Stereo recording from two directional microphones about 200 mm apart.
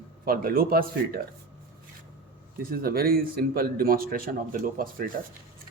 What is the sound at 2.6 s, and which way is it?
A man's voice, 50° right (ahead or behind).